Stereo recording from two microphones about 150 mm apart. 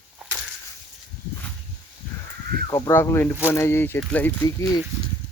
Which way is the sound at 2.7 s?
25° left (ahead or behind).